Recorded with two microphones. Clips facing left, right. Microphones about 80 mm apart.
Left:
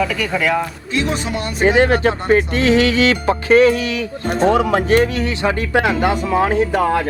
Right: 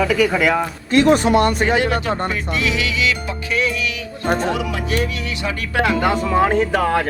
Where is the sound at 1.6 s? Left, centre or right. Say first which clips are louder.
Left 5 dB; left.